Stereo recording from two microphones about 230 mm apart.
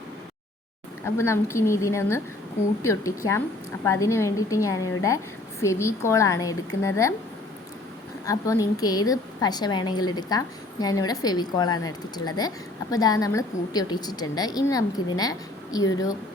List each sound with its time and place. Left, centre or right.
1.0 s a woman's voice: centre
8.3 s a woman's voice: centre